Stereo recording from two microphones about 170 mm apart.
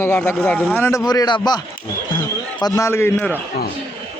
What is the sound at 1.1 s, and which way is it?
Speech, 25° left (ahead or behind).